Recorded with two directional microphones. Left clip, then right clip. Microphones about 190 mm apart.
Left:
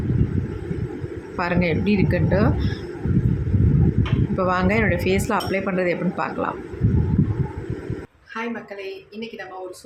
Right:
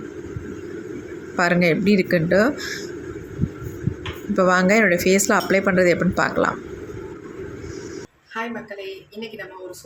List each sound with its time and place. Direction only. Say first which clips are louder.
1.4 s speech: right 4 dB; 20° right (ahead or behind)
4.4 s speech: right 5 dB; 20° right (ahead or behind)